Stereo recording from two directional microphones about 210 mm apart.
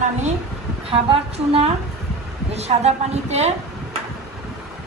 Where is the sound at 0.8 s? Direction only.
25° right (ahead or behind).